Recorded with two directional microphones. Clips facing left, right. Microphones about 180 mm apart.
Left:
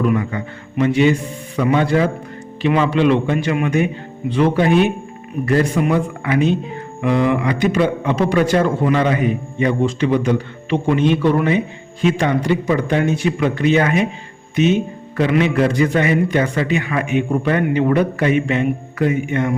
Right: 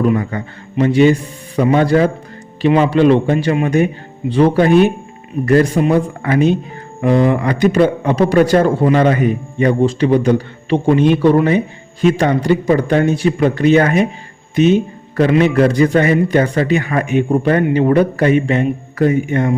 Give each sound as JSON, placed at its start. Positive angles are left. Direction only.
{"t": 0.0, "sound": "a man's voice", "side_deg": -35}